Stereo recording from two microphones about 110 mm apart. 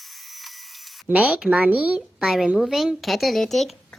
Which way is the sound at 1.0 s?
10° right (ahead or behind).